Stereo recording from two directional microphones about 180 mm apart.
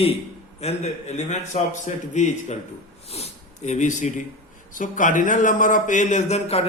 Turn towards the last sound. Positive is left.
turn(degrees=35)  # may be behind; listen again after turning